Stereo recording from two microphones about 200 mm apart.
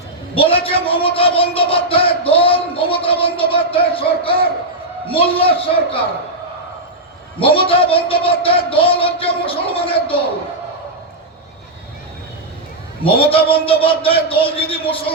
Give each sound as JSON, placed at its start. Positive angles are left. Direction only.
{"t": 0.3, "sound": "a man's voice", "side_deg": 25}
{"t": 7.3, "sound": "a man's voice", "side_deg": 25}
{"t": 13.1, "sound": "a man's voice", "side_deg": 25}